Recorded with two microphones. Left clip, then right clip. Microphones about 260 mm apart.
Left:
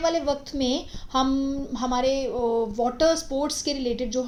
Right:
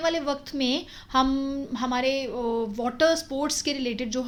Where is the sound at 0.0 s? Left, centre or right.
Right.